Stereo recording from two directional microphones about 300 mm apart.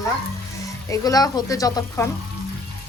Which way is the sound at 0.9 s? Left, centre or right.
Centre.